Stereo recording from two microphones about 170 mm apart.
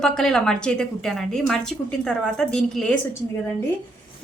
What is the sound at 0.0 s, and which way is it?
A woman's voice, 5° left (ahead or behind).